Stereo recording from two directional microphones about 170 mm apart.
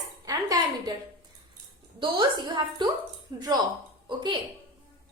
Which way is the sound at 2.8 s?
25° right (ahead or behind).